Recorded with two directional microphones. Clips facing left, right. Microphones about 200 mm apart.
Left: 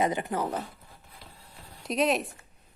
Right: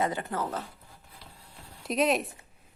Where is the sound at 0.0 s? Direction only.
15° left (ahead or behind).